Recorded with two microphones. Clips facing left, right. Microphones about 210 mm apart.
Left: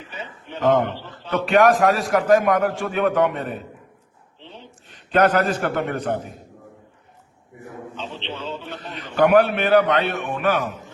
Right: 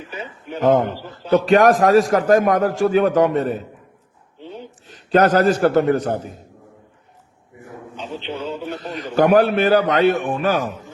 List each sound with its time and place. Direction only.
0.2 s a man's voice: 10° right (ahead or behind)
0.6 s a man's voice: 40° right (ahead or behind)
4.6 s a man's voice: 40° right (ahead or behind)
7.9 s a man's voice: 10° right (ahead or behind)
8.8 s a man's voice: 40° right (ahead or behind)